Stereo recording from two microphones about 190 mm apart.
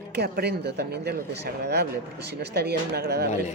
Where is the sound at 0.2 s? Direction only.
60° right (ahead or behind).